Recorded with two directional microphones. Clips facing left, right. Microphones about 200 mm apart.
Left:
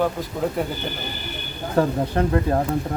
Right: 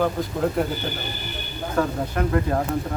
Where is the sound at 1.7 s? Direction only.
30° left (ahead or behind).